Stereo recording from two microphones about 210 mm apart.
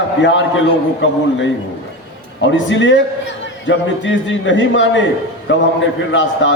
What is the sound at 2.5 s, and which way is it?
A man's voice, 60° left (ahead or behind).